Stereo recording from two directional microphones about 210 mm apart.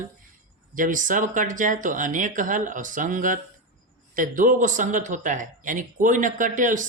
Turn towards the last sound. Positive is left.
turn(degrees=-40)  # may be behind; listen again after turning